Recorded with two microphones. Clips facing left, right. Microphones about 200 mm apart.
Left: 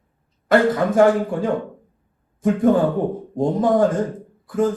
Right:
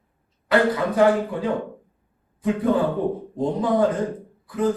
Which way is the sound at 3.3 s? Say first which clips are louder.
Left 5 dB; 45° left (ahead or behind).